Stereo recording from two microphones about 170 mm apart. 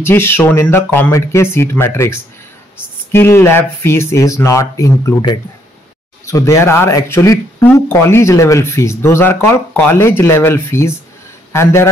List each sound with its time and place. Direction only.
0.0 s speech: 15° left (ahead or behind)